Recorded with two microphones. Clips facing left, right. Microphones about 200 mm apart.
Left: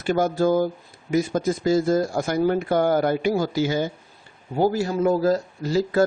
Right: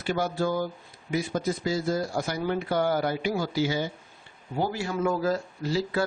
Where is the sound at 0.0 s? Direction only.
45° left (ahead or behind).